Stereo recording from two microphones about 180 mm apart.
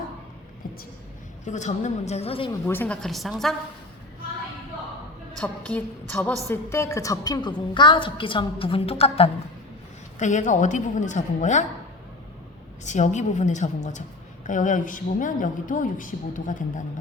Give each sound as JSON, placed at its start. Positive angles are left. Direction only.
{"t": 1.5, "sound": "a woman's voice", "side_deg": 40}
{"t": 2.6, "sound": "a woman's voice", "side_deg": 10}
{"t": 5.4, "sound": "a woman's voice", "side_deg": 10}
{"t": 10.2, "sound": "a woman's voice", "side_deg": 45}
{"t": 12.8, "sound": "a woman's voice", "side_deg": 40}